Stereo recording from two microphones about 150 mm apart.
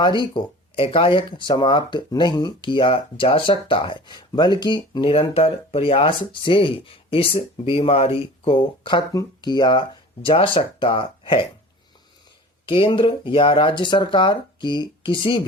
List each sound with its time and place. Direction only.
0.0 s speech: 30° left (ahead or behind)
12.6 s speech: 35° left (ahead or behind)